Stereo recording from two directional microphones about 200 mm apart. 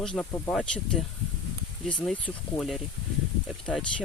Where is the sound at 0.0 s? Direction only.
5° left (ahead or behind).